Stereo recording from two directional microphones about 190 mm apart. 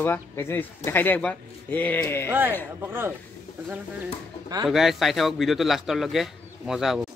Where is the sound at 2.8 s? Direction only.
10° right (ahead or behind).